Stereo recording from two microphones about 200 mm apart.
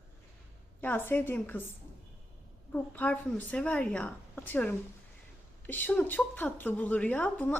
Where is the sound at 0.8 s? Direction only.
10° left (ahead or behind).